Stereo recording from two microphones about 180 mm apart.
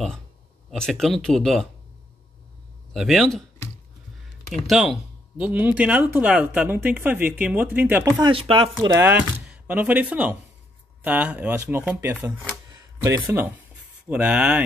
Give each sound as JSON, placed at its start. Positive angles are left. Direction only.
{"t": 0.7, "sound": "speech", "side_deg": 5}
{"t": 2.9, "sound": "speech", "side_deg": 0}
{"t": 4.6, "sound": "speech", "side_deg": 0}
{"t": 8.3, "sound": "speech", "side_deg": -30}
{"t": 9.1, "sound": "speech", "side_deg": -10}
{"t": 12.7, "sound": "cash register", "side_deg": -15}
{"t": 14.0, "sound": "speech", "side_deg": -5}